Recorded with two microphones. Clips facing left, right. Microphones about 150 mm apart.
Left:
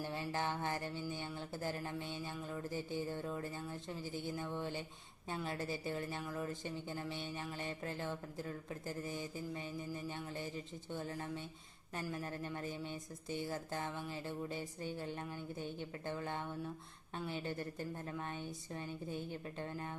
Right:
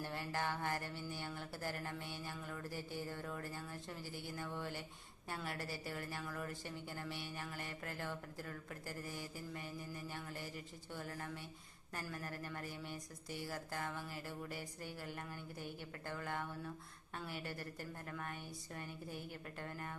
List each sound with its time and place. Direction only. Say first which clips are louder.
0.0 s a woman's voice: left 2 dB; 15° left (ahead or behind)